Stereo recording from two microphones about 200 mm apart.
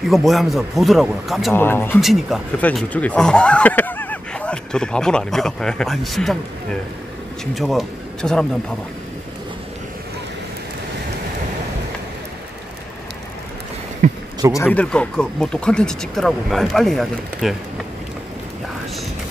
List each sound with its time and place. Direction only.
0.0 s speech: centre (ahead or behind)
1.5 s speech: 10° left (ahead or behind)
2.0 s a man's voice: centre (ahead or behind)
14.0 s a sound: 40° right (ahead or behind)
14.5 s speech: 10° left (ahead or behind)